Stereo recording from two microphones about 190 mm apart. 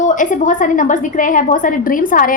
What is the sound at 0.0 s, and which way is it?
A woman's voice, 40° left (ahead or behind).